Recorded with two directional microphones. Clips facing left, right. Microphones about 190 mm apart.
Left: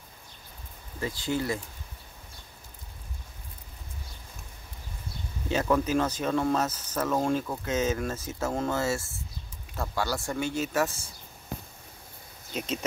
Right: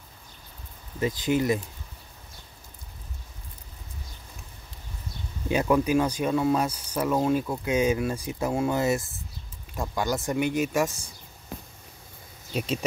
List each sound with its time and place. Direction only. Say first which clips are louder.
0.9 s speech: right 5 dB; 20° right (ahead or behind)
5.5 s speech: right 3 dB; 15° right (ahead or behind)